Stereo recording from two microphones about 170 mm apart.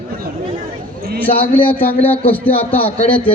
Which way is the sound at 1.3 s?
35° left (ahead or behind).